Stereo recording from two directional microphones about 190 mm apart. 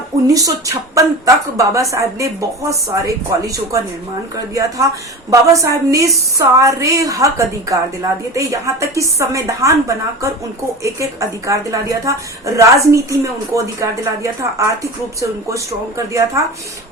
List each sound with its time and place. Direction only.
0.3 s a woman's voice: 20° right (ahead or behind)